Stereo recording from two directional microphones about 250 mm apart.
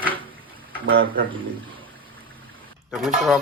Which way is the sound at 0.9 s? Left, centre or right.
Right.